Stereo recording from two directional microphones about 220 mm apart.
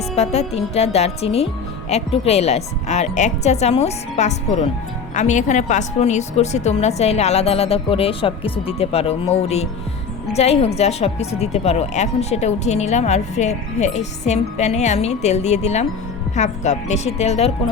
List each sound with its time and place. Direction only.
0.2 s a woman's voice: 30° left (ahead or behind)